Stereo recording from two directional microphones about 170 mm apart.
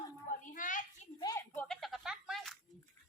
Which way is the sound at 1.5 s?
5° left (ahead or behind).